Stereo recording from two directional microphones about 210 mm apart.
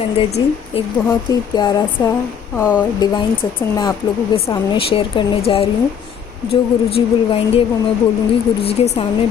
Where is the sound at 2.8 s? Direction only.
20° left (ahead or behind).